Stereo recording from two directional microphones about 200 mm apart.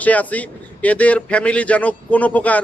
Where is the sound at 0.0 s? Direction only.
5° left (ahead or behind).